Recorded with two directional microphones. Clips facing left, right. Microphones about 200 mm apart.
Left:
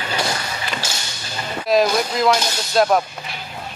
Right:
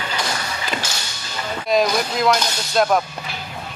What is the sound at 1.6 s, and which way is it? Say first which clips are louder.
Speech: left 2 dB; centre (ahead or behind).